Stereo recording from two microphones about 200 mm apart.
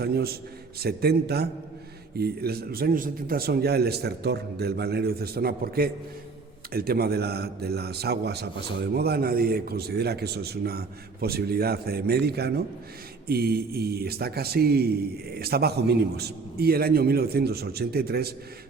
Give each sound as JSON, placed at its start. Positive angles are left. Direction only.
{"t": 0.0, "sound": "a man's voice", "side_deg": -50}